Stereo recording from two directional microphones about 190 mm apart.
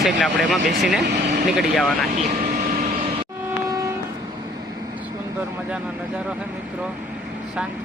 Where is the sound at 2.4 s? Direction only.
45° right (ahead or behind).